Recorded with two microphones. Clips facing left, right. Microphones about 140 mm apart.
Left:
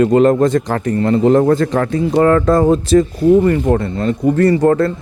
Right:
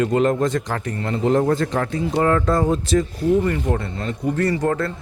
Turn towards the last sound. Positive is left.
turn(degrees=35)  # may be behind; listen again after turning